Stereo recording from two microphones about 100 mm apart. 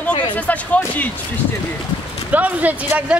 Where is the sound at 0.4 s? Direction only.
15° left (ahead or behind).